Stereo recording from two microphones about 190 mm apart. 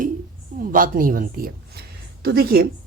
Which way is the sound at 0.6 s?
45° right (ahead or behind).